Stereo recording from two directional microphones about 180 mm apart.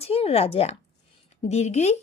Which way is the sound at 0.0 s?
35° left (ahead or behind).